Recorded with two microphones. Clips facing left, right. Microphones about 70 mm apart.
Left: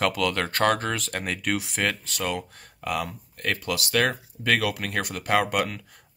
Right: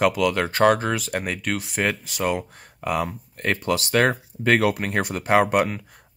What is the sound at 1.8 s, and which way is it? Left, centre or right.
Speech, centre.